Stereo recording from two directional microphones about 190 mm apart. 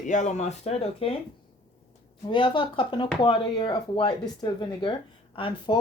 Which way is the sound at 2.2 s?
25° left (ahead or behind).